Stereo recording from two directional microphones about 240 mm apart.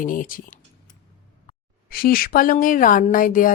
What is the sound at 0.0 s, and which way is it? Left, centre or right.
Speech, left.